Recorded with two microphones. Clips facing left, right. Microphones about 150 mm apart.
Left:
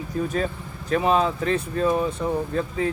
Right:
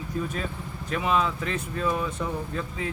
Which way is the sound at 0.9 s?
35° left (ahead or behind).